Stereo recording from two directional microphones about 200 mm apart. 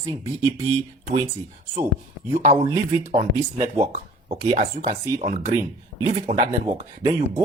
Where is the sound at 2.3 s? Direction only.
30° right (ahead or behind).